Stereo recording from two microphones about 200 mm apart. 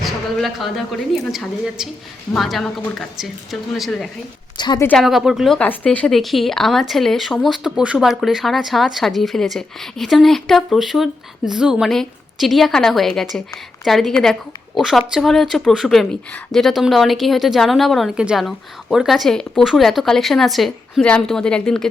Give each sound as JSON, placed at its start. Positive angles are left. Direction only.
{"t": 0.0, "sound": "speech", "side_deg": 0}
{"t": 4.5, "sound": "a woman's voice", "side_deg": 20}
{"t": 4.9, "sound": "speech", "side_deg": 0}